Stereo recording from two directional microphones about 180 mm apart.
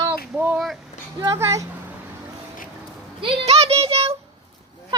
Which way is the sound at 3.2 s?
30° right (ahead or behind).